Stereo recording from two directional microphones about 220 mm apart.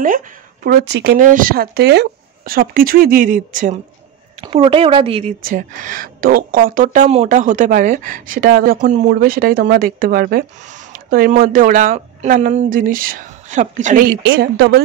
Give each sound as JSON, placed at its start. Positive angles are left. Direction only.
{"t": 0.7, "sound": "speech", "side_deg": -50}
{"t": 4.4, "sound": "speech", "side_deg": -25}
{"t": 5.4, "sound": "speech", "side_deg": -40}
{"t": 14.2, "sound": "speech", "side_deg": -45}